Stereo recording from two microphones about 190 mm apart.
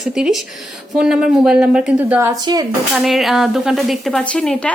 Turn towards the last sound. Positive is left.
turn(degrees=5)  # may be behind; listen again after turning